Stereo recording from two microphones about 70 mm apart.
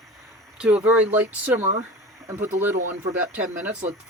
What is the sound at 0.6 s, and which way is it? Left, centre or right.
Speech, centre.